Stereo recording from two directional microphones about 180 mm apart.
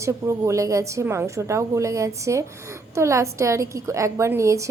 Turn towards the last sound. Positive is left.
turn(degrees=-15)  # may be behind; listen again after turning